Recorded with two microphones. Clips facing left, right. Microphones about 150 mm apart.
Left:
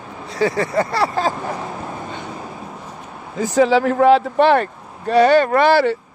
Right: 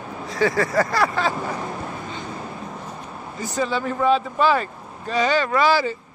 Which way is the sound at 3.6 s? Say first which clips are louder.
Left 9 dB; 90° left.